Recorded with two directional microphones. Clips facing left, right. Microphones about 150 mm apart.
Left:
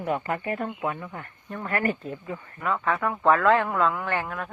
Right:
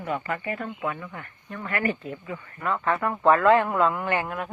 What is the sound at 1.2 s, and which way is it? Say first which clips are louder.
Speech: left 2 dB; 35° left (ahead or behind).